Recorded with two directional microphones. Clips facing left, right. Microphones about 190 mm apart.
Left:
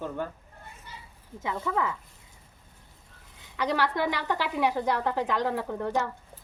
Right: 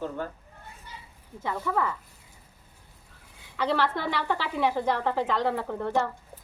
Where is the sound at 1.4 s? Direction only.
15° left (ahead or behind).